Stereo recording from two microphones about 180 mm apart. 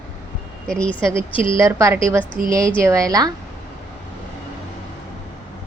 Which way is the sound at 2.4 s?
50° right (ahead or behind).